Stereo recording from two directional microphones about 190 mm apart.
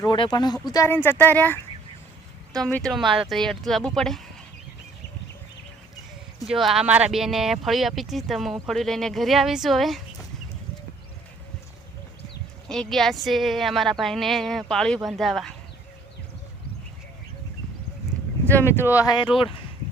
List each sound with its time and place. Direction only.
0.0 s speech: 25° left (ahead or behind); by 4.2 s 5° left (ahead or behind)
6.4 s speech: centre (ahead or behind)
12.6 s speech: 5° left (ahead or behind)
18.4 s speech: 10° left (ahead or behind)